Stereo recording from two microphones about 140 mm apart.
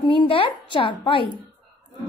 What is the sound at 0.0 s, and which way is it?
A woman's voice, 40° left (ahead or behind).